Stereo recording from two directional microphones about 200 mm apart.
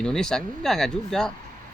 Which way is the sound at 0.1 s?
5° left (ahead or behind).